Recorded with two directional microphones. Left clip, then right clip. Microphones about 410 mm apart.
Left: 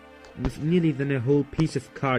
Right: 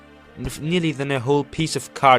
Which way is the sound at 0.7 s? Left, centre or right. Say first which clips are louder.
Right 3 dB; centre.